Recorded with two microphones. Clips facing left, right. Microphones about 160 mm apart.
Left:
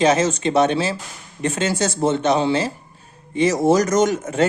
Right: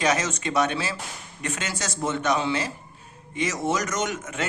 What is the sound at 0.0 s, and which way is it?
Speech, 30° left (ahead or behind).